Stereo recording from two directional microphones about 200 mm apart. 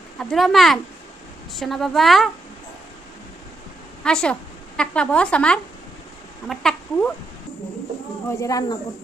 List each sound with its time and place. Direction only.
0.2 s a woman's voice: centre (ahead or behind)
4.0 s a woman's voice: 5° left (ahead or behind)
6.4 s cat: centre (ahead or behind)
8.4 s speech: 15° left (ahead or behind)